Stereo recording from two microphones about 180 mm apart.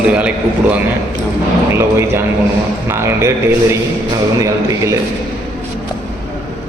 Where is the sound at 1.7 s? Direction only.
15° right (ahead or behind).